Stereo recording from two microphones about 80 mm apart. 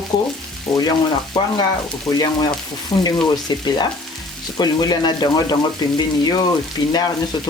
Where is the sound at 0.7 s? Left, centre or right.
Left.